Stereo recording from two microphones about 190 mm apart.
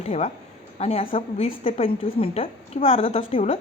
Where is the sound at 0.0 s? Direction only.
35° left (ahead or behind).